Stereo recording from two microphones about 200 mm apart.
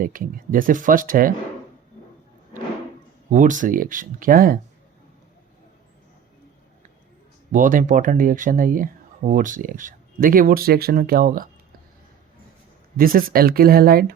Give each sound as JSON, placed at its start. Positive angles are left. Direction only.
{"t": 0.0, "sound": "speech", "side_deg": -45}
{"t": 3.3, "sound": "speech", "side_deg": -40}
{"t": 7.5, "sound": "speech", "side_deg": -40}
{"t": 13.0, "sound": "speech", "side_deg": -45}